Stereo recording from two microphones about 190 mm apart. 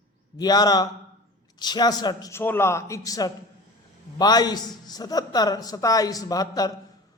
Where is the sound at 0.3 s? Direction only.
20° left (ahead or behind).